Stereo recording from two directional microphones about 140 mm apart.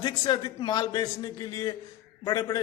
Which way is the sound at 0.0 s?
30° left (ahead or behind).